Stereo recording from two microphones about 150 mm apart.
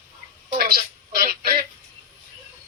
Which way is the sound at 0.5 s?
90° right.